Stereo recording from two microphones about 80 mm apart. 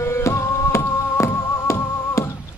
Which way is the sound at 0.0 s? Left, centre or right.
Left.